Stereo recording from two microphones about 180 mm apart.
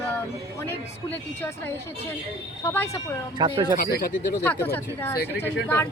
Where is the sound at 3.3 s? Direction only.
25° right (ahead or behind).